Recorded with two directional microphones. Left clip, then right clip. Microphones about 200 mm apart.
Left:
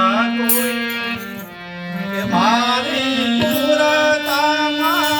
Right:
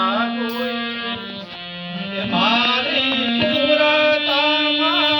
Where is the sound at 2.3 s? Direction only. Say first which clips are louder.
Left 2 dB; 30° left (ahead or behind).